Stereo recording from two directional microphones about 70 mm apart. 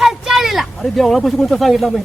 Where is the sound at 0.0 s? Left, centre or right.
Centre.